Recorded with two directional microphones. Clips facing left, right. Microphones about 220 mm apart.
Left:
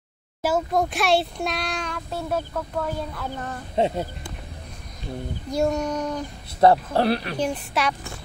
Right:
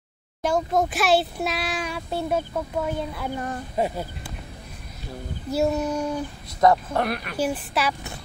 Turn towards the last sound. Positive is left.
turn(degrees=-5)  # may be behind; listen again after turning